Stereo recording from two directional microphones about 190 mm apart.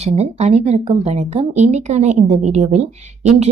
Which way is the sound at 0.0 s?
35° right (ahead or behind).